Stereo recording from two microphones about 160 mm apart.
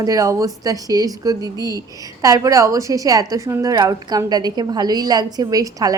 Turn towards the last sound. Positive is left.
turn(degrees=-20)  # may be behind; listen again after turning